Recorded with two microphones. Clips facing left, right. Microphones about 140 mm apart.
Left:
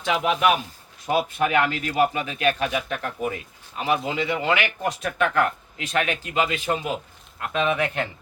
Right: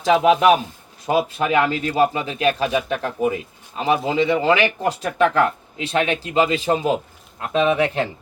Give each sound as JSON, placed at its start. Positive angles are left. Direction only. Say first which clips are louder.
{"t": 0.0, "sound": "speech", "louder": "right 7 dB", "side_deg": -35}